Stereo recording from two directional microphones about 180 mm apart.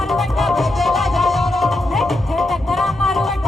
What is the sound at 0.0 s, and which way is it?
Music, centre (ahead or behind).